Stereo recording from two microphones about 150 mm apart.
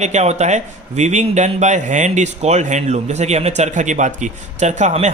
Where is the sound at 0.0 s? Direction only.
50° right (ahead or behind).